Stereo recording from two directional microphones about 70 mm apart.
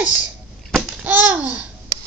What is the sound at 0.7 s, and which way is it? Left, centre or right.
Babbling, centre.